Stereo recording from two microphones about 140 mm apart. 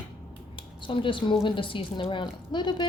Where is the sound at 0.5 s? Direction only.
35° left (ahead or behind).